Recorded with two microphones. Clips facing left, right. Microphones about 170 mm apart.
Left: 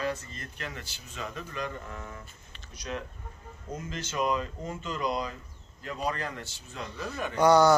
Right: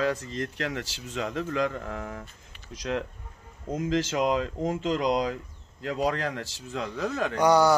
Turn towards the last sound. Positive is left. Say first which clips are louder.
# even
turn(degrees=-10)  # may be behind; listen again after turning